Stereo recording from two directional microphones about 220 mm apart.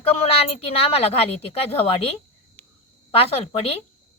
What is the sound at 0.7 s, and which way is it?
Speech, 25° left (ahead or behind).